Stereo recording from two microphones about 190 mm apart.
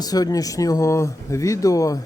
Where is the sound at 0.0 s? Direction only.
20° left (ahead or behind).